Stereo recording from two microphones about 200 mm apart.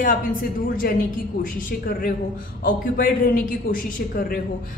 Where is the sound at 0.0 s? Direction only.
45° left (ahead or behind).